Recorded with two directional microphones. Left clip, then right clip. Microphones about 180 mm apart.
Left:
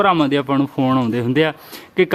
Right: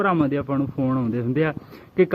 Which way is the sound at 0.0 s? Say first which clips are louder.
Left 6 dB; 35° left (ahead or behind).